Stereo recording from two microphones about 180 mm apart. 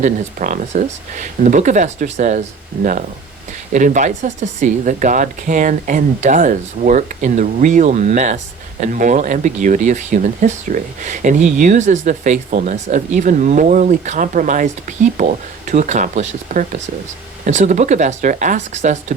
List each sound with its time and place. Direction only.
0.0 s speech: 45° right (ahead or behind)